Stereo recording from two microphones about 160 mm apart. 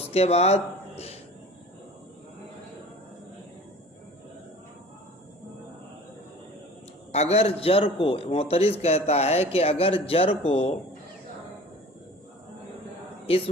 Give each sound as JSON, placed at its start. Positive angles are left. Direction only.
{"t": 0.0, "sound": "speech", "side_deg": 40}
{"t": 7.1, "sound": "speech", "side_deg": 45}
{"t": 13.2, "sound": "speech", "side_deg": 35}